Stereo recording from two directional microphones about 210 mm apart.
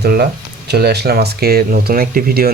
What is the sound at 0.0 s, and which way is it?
Speech, 50° right (ahead or behind).